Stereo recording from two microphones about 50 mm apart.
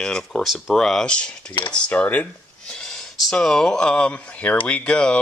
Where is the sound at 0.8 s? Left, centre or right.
Centre.